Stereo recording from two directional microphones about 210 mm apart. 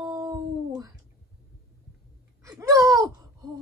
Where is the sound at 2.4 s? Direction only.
15° right (ahead or behind).